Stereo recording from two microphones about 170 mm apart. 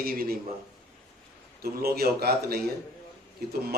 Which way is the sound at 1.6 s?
65° right (ahead or behind).